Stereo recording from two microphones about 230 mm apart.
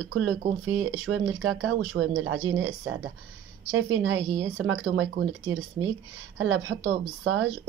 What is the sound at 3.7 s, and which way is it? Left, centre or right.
Speech, right.